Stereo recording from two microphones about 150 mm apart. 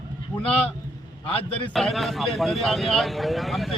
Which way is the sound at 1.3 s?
40° left (ahead or behind).